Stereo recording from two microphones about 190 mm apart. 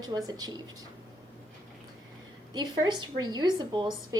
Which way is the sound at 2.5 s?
20° right (ahead or behind).